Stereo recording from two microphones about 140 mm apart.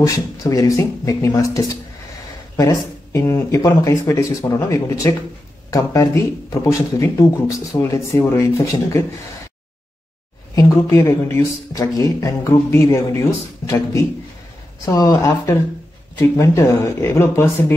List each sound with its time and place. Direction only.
0.0 s speech: 25° left (ahead or behind)
10.5 s speech: 25° left (ahead or behind)